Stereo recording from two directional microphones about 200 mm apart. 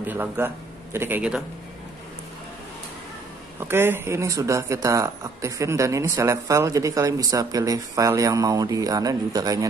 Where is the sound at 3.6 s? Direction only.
10° right (ahead or behind).